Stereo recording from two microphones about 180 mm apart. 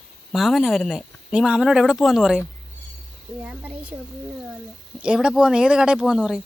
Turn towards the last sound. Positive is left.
turn(degrees=-5)  # may be behind; listen again after turning